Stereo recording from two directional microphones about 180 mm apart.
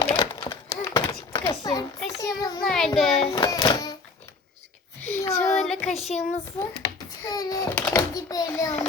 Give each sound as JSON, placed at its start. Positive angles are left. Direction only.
{"t": 0.0, "sound": "a sound", "side_deg": 30}
{"t": 2.0, "sound": "child singing", "side_deg": 20}
{"t": 2.6, "sound": "a child's voice", "side_deg": 0}
{"t": 3.3, "sound": "a child's voice", "side_deg": 20}
{"t": 4.9, "sound": "a sound", "side_deg": 10}
{"t": 5.5, "sound": "child singing", "side_deg": 5}
{"t": 6.8, "sound": "a sound", "side_deg": 20}
{"t": 7.8, "sound": "a child's voice", "side_deg": 5}
{"t": 8.1, "sound": "a child's voice", "side_deg": 20}